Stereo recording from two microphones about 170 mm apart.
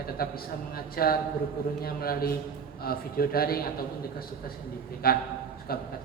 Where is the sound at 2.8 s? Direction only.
60° left (ahead or behind).